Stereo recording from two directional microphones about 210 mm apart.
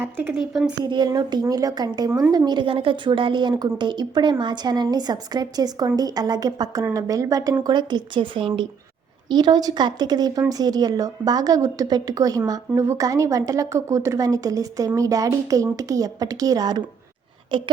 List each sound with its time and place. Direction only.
0.0 s speech: 10° right (ahead or behind)
0.9 s a woman's voice: 20° right (ahead or behind)